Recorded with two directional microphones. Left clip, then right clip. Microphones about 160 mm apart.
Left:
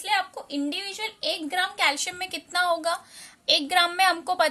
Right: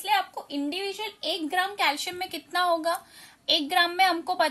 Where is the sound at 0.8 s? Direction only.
35° left (ahead or behind).